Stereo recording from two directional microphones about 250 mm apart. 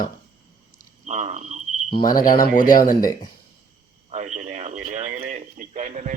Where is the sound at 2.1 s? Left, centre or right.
Left.